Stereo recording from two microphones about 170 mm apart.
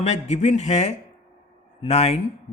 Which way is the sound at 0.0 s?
40° left (ahead or behind).